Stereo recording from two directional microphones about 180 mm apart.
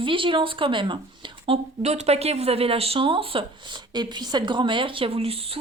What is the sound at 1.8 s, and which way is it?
Speech, 40° right (ahead or behind).